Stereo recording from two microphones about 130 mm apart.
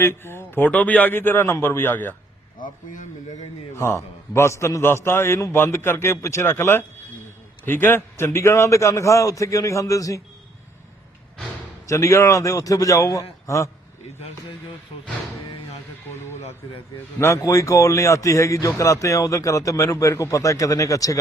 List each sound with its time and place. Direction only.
0.0 s a man's voice: 20° left (ahead or behind)
2.6 s speech: 85° left
3.8 s a man's voice: 20° left (ahead or behind)
11.9 s a man's voice: 25° left (ahead or behind)
16.3 s speech: 60° left (ahead or behind)
17.2 s a man's voice: 20° left (ahead or behind)